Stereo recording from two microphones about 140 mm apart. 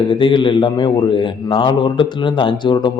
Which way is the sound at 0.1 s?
35° left (ahead or behind).